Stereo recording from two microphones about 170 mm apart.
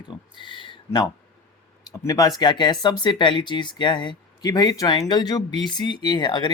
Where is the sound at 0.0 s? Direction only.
30° left (ahead or behind).